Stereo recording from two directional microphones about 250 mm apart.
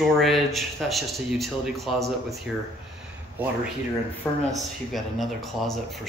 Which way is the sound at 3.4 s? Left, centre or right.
Centre.